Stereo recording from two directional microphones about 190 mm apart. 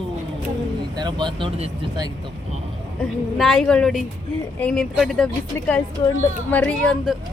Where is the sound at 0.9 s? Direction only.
25° right (ahead or behind).